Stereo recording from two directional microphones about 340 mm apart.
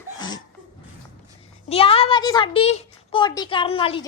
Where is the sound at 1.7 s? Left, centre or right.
Centre.